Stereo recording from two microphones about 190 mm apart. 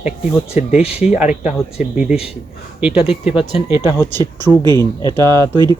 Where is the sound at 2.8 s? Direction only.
5° right (ahead or behind).